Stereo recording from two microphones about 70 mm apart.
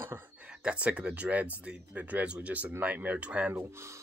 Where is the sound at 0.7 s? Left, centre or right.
Centre.